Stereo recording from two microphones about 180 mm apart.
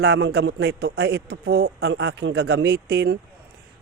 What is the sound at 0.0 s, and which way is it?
A man's voice, 65° right (ahead or behind).